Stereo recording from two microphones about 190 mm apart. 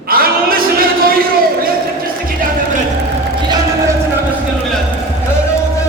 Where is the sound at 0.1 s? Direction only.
50° right (ahead or behind).